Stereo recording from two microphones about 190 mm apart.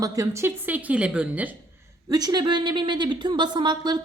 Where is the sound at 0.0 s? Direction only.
20° right (ahead or behind).